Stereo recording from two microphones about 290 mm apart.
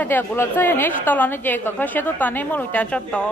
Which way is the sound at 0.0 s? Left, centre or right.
Centre.